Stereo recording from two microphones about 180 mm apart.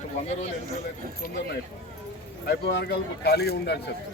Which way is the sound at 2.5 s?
70° left (ahead or behind).